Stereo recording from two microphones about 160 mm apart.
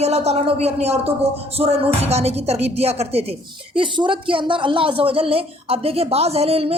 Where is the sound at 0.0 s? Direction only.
40° right (ahead or behind).